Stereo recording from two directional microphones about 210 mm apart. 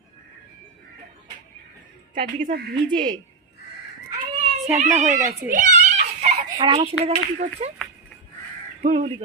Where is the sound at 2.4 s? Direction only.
45° right (ahead or behind).